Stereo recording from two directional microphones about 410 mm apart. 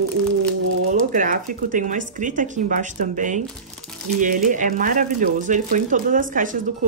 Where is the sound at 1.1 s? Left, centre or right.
Centre.